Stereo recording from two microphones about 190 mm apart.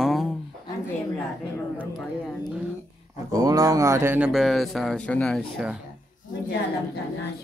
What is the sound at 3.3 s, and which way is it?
Speech, 20° right (ahead or behind).